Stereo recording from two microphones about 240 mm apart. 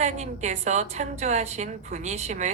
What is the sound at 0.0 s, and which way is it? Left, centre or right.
A woman's voice, right.